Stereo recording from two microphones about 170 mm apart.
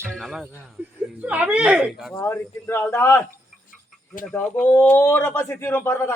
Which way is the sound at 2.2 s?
15° left (ahead or behind).